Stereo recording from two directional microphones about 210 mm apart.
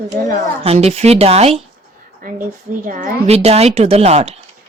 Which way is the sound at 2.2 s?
40° right (ahead or behind).